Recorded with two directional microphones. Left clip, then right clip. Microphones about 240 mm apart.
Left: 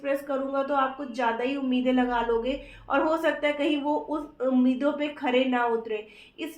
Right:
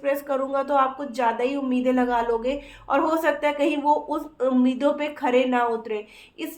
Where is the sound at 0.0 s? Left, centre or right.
Right.